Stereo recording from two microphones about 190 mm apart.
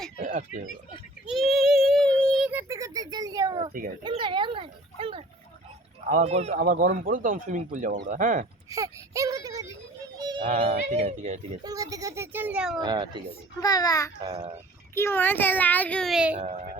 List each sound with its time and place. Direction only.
0.2 s a sound: 40° right (ahead or behind)
1.3 s child singing: centre (ahead or behind)
2.5 s a sound: 15° right (ahead or behind)
4.0 s speech: 25° right (ahead or behind)
6.6 s speech: 45° right (ahead or behind)
8.7 s a sound: 15° right (ahead or behind)
10.6 s speech: 30° right (ahead or behind)
11.6 s a child's voice: 20° right (ahead or behind)
12.8 s speech: 20° right (ahead or behind)
13.6 s a child's voice: 20° left (ahead or behind)
14.3 s speech: 30° right (ahead or behind)
14.9 s a child's voice: 10° left (ahead or behind); by 16.4 s 5° right (ahead or behind)
16.4 s speech: 35° right (ahead or behind)